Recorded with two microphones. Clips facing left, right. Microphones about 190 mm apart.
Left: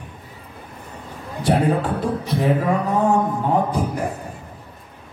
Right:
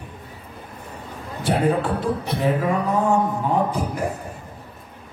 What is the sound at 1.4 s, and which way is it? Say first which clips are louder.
Music: left 1 dB; 40° left (ahead or behind).